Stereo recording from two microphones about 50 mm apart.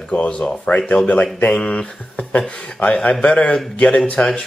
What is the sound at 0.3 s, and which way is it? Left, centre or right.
Speech, centre.